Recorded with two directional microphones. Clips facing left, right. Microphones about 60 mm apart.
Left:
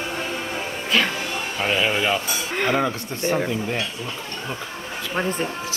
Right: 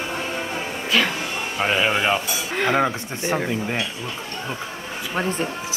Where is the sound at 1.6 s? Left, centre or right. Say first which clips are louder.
Right 1 dB; centre.